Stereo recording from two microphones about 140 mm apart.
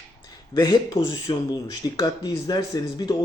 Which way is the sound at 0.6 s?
30° left (ahead or behind).